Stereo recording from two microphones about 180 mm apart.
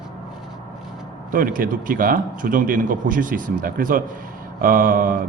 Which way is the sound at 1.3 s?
50° right (ahead or behind).